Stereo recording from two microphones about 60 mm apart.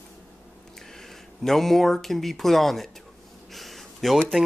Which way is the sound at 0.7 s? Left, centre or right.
Centre.